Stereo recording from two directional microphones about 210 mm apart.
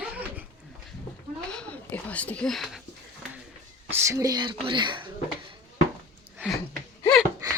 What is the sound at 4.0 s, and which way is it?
Speech, 15° right (ahead or behind).